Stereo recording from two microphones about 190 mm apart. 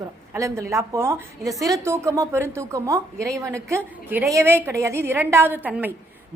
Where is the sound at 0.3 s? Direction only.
15° right (ahead or behind).